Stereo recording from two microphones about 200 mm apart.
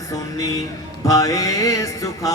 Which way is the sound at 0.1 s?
15° left (ahead or behind).